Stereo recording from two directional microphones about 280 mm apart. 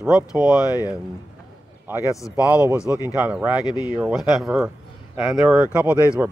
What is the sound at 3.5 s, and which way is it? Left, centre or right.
Speech, centre.